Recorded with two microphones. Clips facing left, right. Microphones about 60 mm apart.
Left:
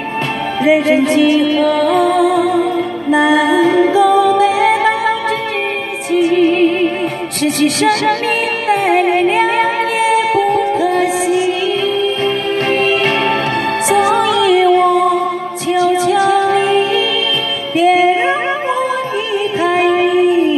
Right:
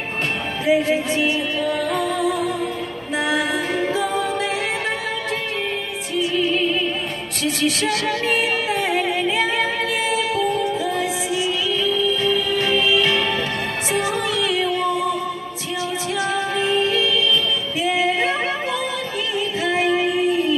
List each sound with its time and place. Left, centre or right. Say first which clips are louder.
0.7 s music: left 7 dB; left
3.7 s a capella: left 11 dB; left
6.1 s music: left 10 dB; left
7.4 s speech: left 8 dB; left
8.6 s music: left 9 dB; left
13.8 s music: left 10 dB; left
15.7 s music: left 13 dB; left
17.7 s music: left 12 dB; left
18.0 s a sound: left 8 dB; left
19.6 s a sound: left 7 dB; left